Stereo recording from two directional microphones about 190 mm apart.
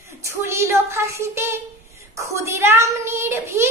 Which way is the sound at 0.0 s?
15° right (ahead or behind).